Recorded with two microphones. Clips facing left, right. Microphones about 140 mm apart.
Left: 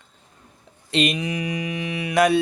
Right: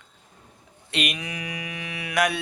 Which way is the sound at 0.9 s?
30° left (ahead or behind).